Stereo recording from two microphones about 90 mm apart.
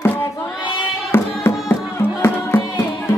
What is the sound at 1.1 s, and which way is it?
Music, 25° left (ahead or behind).